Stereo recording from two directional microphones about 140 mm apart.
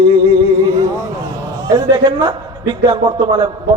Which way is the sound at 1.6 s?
30° right (ahead or behind).